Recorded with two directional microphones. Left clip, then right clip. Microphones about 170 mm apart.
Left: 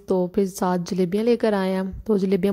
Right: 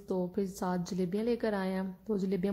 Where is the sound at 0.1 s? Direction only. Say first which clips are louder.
Left 12 dB; 45° left (ahead or behind).